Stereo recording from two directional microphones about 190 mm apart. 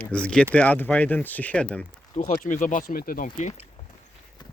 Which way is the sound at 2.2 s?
40° left (ahead or behind).